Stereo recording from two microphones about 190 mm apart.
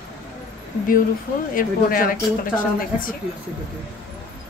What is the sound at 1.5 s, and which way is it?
Speech, 50° left (ahead or behind).